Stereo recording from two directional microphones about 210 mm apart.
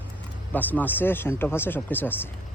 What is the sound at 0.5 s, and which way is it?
Speech, 10° left (ahead or behind).